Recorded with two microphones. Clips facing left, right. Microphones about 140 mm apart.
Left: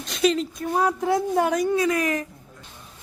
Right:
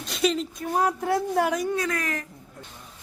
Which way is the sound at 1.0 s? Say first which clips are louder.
Left 2 dB; 20° left (ahead or behind).